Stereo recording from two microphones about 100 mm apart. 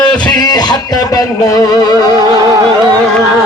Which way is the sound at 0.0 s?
45° left (ahead or behind).